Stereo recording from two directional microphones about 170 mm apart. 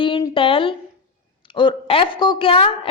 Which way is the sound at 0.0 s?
30° left (ahead or behind).